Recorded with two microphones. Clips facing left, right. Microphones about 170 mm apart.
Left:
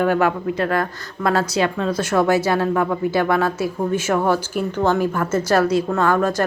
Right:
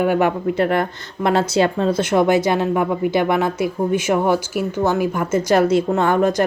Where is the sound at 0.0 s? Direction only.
15° right (ahead or behind).